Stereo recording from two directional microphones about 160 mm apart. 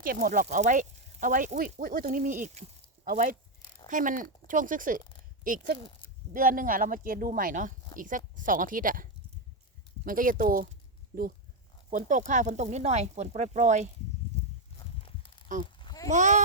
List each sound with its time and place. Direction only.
0.0 s speech: 60° right (ahead or behind)
0.4 s speech: 50° right (ahead or behind)
11.9 s speech: 50° right (ahead or behind)
14.8 s a sound: 30° left (ahead or behind)
16.0 s speech: 50° right (ahead or behind)